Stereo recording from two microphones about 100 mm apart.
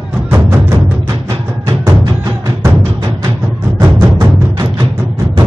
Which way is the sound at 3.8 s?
30° right (ahead or behind).